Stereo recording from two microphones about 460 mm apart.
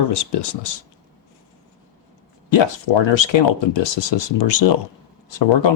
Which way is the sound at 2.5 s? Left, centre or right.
Left.